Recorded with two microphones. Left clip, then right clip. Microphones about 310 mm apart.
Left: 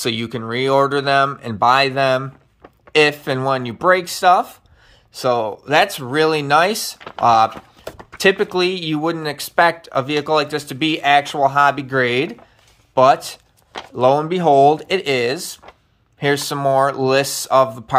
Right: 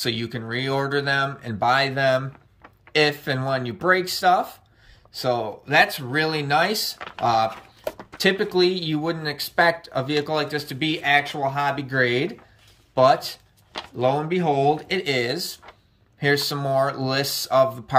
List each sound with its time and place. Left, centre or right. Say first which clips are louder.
0.0 s speech: left 5 dB; centre